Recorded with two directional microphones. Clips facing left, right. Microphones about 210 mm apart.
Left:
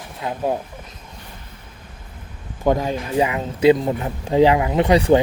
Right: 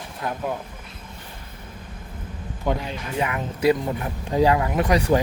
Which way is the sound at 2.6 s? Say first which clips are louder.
Left 7 dB; 45° left (ahead or behind).